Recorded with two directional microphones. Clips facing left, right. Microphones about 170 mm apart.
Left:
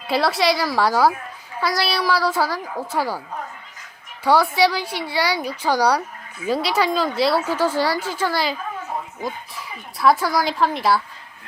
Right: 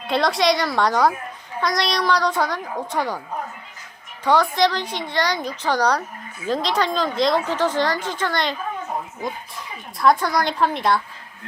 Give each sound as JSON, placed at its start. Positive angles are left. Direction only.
{"t": 0.1, "sound": "a woman's voice", "side_deg": 5}
{"t": 4.2, "sound": "a woman's voice", "side_deg": 10}